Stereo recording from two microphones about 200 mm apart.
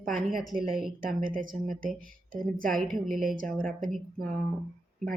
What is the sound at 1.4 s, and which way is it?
Speech, 45° right (ahead or behind).